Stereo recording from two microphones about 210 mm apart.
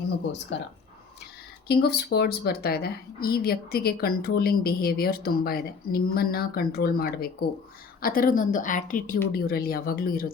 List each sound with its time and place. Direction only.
0.5 s a woman's voice: 60° left (ahead or behind)